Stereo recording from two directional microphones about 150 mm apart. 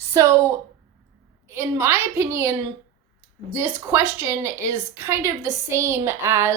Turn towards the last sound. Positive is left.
turn(degrees=-15)  # may be behind; listen again after turning